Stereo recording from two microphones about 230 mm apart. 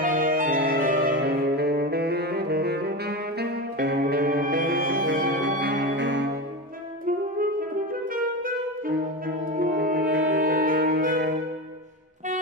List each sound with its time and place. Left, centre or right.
0.0 s music: right
7.9 s music: right